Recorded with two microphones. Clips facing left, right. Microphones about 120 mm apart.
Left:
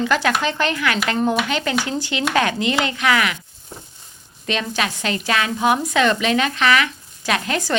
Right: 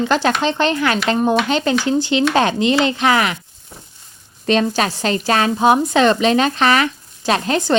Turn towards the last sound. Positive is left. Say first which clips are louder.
# right 5 dB
turn(degrees=-30)  # may be behind; listen again after turning